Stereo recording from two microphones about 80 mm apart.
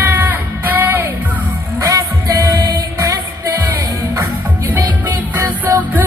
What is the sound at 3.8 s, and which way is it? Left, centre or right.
Music, right.